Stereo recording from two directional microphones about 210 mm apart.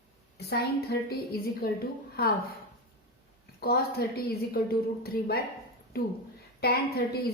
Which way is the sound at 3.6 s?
50° left (ahead or behind).